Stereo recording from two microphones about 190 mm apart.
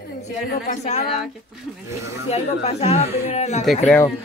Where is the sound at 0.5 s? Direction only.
40° left (ahead or behind).